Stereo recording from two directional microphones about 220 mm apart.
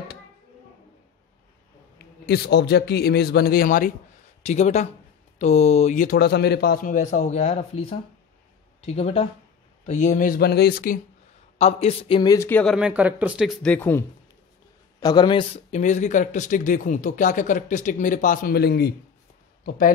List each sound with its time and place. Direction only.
2.2 s a man's voice: 45° left (ahead or behind)
11.5 s a man's voice: 30° left (ahead or behind); by 12.7 s 10° left (ahead or behind)
12.7 s speech: 5° right (ahead or behind); by 18.9 s 45° left (ahead or behind)